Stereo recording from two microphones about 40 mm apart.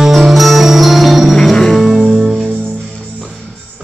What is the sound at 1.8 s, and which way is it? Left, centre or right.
Music, centre.